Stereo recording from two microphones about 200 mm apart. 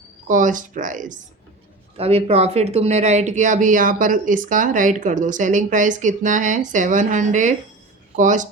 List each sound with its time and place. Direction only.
0.3 s speech: 40° right (ahead or behind)